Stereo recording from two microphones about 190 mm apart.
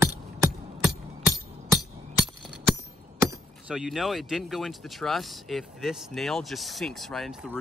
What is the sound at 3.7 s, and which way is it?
Speech, centre (ahead or behind).